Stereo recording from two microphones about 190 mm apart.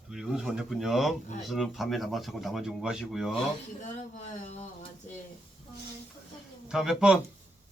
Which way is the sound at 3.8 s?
40° left (ahead or behind).